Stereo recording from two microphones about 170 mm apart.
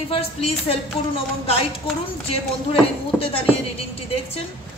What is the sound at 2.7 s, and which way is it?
Speech, 30° left (ahead or behind).